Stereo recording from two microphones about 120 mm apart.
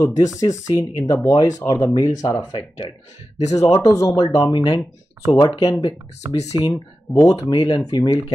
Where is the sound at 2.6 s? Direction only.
40° left (ahead or behind).